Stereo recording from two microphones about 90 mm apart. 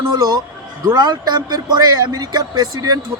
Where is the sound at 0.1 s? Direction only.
50° right (ahead or behind).